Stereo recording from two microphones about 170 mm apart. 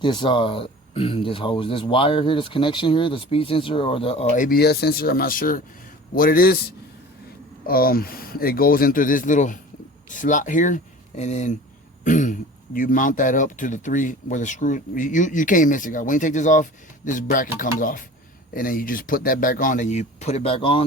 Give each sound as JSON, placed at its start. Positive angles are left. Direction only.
{"t": 0.0, "sound": "speech", "side_deg": 30}